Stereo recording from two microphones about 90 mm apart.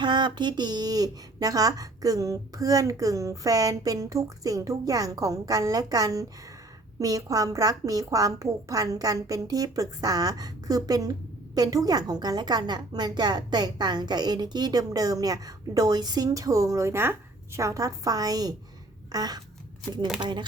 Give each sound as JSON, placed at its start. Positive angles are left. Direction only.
{"t": 0.0, "sound": "a woman's voice", "side_deg": -55}
{"t": 20.1, "sound": "speech", "side_deg": -55}